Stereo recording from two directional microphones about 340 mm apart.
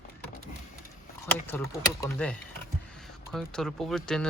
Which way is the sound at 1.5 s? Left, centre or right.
Centre.